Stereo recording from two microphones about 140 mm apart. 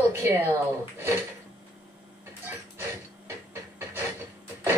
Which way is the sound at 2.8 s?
15° right (ahead or behind).